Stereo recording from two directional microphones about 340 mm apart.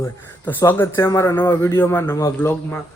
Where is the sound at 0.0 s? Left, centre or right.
Centre.